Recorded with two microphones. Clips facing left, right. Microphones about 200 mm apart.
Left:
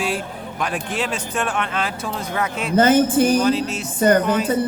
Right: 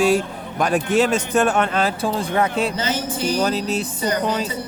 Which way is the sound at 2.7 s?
55° left (ahead or behind).